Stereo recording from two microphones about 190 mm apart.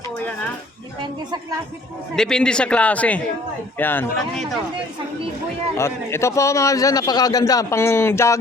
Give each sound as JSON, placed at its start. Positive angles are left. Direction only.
{"t": 2.1, "sound": "a man's voice", "side_deg": 5}
{"t": 5.7, "sound": "a man's voice", "side_deg": 15}